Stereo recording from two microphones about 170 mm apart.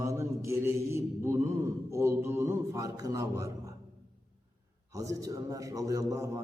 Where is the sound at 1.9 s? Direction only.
15° right (ahead or behind).